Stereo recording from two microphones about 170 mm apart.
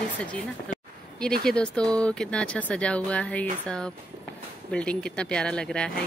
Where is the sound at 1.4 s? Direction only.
5° left (ahead or behind).